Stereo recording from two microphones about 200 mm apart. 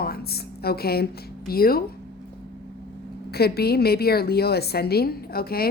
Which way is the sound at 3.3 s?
50° left (ahead or behind).